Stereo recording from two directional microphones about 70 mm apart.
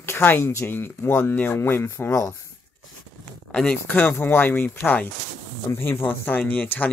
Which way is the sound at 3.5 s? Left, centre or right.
Centre.